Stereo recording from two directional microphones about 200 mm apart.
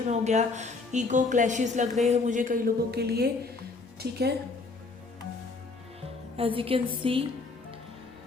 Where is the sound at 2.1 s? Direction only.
40° right (ahead or behind).